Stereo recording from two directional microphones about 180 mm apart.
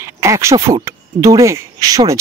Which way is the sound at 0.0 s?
15° right (ahead or behind).